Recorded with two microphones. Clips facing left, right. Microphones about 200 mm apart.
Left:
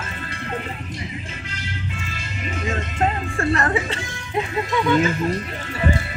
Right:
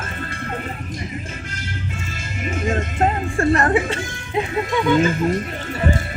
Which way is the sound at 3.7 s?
50° right (ahead or behind).